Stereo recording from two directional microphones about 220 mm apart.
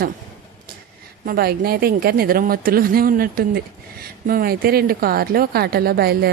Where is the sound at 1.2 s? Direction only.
45° right (ahead or behind).